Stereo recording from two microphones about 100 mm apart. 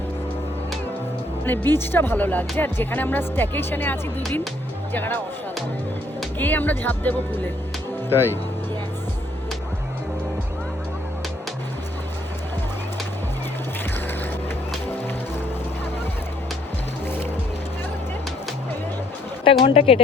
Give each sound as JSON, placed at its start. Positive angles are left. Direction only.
{"t": 1.5, "sound": "speech", "side_deg": 20}
{"t": 6.4, "sound": "speech", "side_deg": 15}
{"t": 19.5, "sound": "speech", "side_deg": 70}